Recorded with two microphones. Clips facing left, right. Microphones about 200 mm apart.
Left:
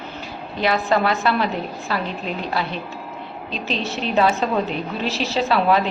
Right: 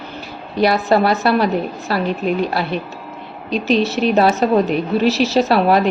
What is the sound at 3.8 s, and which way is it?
A woman's voice, 40° right (ahead or behind).